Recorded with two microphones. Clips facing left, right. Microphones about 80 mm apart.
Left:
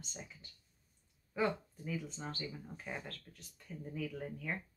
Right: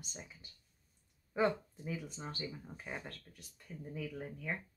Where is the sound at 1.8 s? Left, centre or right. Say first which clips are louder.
Left 1 dB; centre.